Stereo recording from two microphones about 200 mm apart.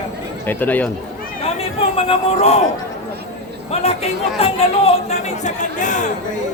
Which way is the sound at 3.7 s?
30° left (ahead or behind).